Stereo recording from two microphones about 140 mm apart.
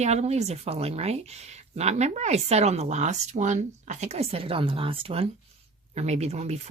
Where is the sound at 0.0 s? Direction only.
50° right (ahead or behind).